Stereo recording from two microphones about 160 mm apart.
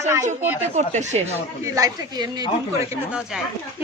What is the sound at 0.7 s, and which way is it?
Speech, 45° right (ahead or behind).